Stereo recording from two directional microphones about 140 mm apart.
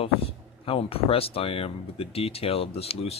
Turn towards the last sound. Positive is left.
turn(degrees=45)  # may be behind; listen again after turning